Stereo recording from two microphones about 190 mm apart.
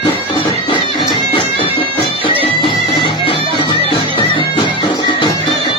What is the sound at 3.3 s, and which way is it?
Music, 25° right (ahead or behind).